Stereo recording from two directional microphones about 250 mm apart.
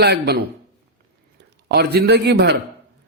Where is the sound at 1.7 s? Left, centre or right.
Right.